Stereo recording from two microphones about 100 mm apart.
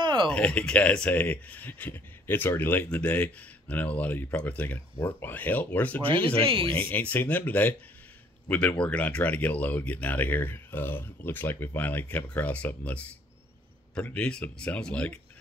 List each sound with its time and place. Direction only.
0.0 s a sound: 50° right (ahead or behind)
0.3 s speech: 10° left (ahead or behind)
6.4 s speech: 65° right (ahead or behind)
6.7 s speech: 20° left (ahead or behind)